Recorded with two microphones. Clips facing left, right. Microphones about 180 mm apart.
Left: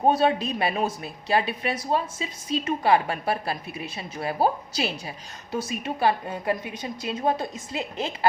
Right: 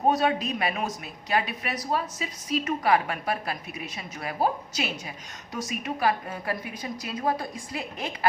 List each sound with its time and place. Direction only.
0.1 s a woman's voice: 30° left (ahead or behind)